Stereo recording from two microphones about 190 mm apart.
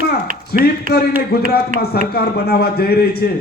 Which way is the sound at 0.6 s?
55° left (ahead or behind).